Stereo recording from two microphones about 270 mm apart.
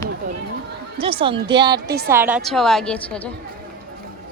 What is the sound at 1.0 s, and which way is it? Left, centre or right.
Speech, centre.